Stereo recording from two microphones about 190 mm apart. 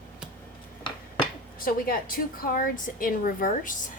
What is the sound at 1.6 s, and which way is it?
A woman's voice, 50° left (ahead or behind).